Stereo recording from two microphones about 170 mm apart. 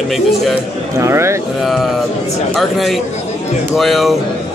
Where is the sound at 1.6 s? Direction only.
Centre (ahead or behind).